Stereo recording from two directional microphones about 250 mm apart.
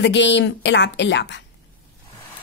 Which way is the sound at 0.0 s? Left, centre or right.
Left.